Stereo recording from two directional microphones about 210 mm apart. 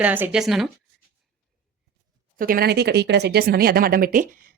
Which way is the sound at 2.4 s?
45° right (ahead or behind).